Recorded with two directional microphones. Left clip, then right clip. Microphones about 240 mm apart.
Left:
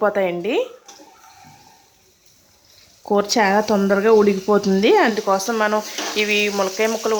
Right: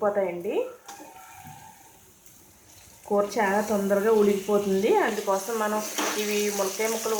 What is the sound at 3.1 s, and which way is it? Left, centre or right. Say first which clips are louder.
A woman's voice: left 7 dB; left.